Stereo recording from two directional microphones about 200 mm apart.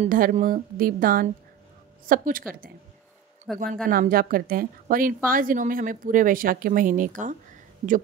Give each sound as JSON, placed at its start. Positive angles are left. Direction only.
{"t": 0.0, "sound": "a woman's voice", "side_deg": -40}
{"t": 3.5, "sound": "speech", "side_deg": 0}
{"t": 3.8, "sound": "a woman's voice", "side_deg": -45}